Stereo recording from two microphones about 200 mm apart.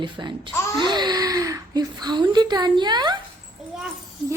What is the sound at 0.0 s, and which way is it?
Speech, 25° right (ahead or behind).